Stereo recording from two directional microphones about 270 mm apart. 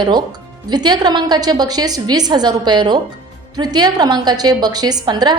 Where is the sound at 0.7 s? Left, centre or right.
Centre.